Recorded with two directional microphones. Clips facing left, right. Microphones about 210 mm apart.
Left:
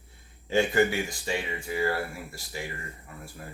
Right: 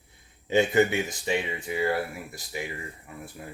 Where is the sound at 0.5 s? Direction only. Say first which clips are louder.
Right 2 dB; 20° right (ahead or behind).